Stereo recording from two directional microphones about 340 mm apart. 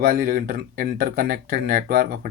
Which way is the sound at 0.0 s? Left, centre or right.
Right.